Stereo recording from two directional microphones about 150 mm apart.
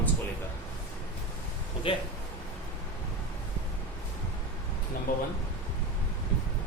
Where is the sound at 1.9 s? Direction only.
35° left (ahead or behind).